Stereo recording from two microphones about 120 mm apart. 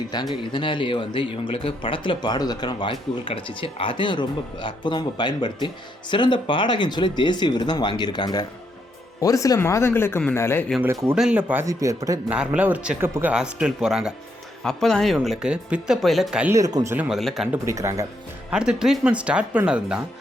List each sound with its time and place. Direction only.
0.1 s speech: 35° left (ahead or behind); by 10.7 s 20° left (ahead or behind)
10.8 s speech: 20° right (ahead or behind)
11.1 s speech: 10° right (ahead or behind)
11.6 s speech: 25° right (ahead or behind)
12.3 s speech: 10° right (ahead or behind)
13.3 s speech: 5° right (ahead or behind)
16.5 s speech: 30° right (ahead or behind)
17.1 s speech: centre (ahead or behind)
17.7 s speech: 25° right (ahead or behind)
18.5 s speech: 5° right (ahead or behind)